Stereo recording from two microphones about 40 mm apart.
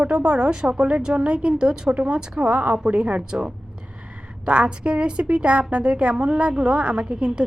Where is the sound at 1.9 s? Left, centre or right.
Right.